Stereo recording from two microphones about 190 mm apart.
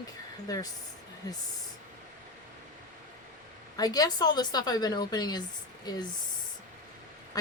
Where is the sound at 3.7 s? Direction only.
20° left (ahead or behind).